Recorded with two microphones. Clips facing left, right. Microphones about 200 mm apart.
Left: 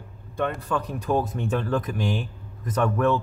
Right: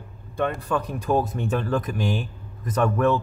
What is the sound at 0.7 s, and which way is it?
A man's voice, 10° right (ahead or behind).